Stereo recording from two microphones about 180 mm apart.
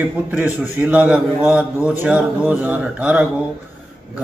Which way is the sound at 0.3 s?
10° right (ahead or behind).